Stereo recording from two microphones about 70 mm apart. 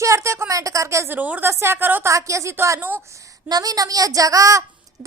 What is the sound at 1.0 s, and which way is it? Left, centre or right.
Speech, right.